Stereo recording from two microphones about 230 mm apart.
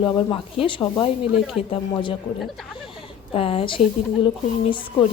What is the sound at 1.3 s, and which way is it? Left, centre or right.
Speech, centre.